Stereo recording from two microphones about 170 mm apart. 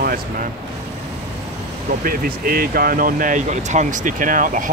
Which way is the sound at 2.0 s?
60° right (ahead or behind).